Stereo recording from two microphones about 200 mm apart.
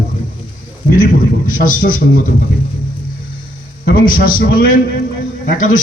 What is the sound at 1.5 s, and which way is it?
Speech, 45° left (ahead or behind).